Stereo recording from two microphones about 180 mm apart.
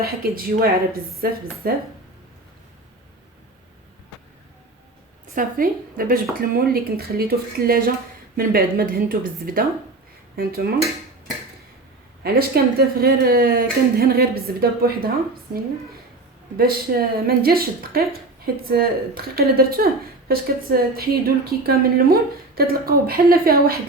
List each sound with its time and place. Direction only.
0.0 s speech: 55° right (ahead or behind)
5.3 s a woman's voice: 50° right (ahead or behind)
12.2 s speech: 60° right (ahead or behind)
16.6 s speech: 55° right (ahead or behind)